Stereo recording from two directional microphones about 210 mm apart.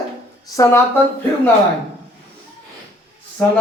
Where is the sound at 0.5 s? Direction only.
15° left (ahead or behind).